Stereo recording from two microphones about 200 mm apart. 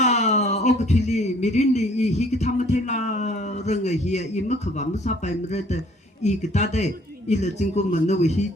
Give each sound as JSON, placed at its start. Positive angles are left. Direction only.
{"t": 0.0, "sound": "speech", "side_deg": 35}